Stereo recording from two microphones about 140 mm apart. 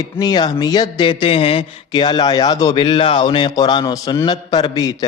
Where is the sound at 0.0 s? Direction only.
30° left (ahead or behind).